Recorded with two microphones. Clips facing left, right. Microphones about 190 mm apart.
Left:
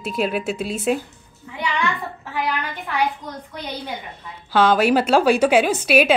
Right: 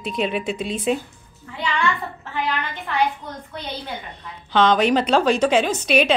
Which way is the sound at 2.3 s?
10° left (ahead or behind).